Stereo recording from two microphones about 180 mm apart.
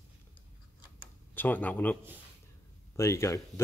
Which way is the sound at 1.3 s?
10° left (ahead or behind).